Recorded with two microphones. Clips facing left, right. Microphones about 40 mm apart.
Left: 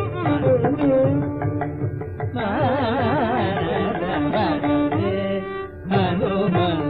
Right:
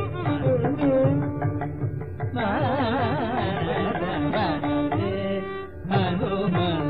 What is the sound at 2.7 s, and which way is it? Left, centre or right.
Carnatic music, centre.